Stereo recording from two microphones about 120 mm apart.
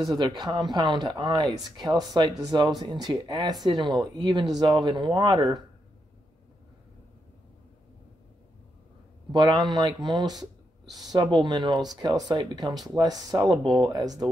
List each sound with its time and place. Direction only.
0.0 s speech: 35° right (ahead or behind)
9.3 s speech: 40° right (ahead or behind)